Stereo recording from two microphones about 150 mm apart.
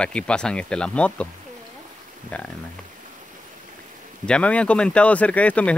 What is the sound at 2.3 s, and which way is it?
Speech, 10° left (ahead or behind).